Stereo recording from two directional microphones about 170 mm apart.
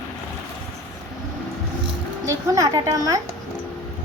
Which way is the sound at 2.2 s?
20° right (ahead or behind).